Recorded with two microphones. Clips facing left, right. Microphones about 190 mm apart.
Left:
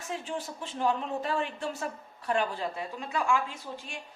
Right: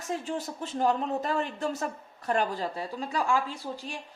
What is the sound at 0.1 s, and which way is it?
A woman's voice, 40° right (ahead or behind).